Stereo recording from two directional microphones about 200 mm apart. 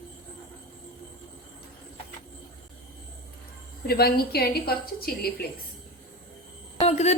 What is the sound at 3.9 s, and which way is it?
A woman's voice, 50° left (ahead or behind).